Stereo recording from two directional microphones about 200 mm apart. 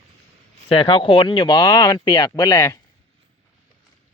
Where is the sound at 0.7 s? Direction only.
25° left (ahead or behind).